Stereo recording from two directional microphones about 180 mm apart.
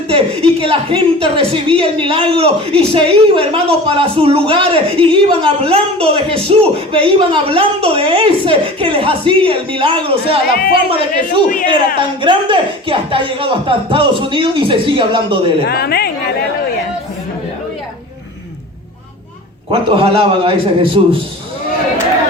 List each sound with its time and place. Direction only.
0.1 s a woman's voice: 30° right (ahead or behind)
10.5 s a woman's voice: 55° left (ahead or behind)
11.9 s speech: 25° right (ahead or behind)
15.6 s speech: 60° left (ahead or behind)
19.7 s speech: 30° right (ahead or behind)